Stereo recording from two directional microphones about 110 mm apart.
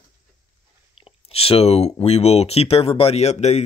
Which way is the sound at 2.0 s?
70° left (ahead or behind).